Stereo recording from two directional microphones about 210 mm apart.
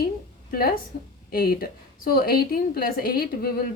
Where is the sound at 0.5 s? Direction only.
45° left (ahead or behind).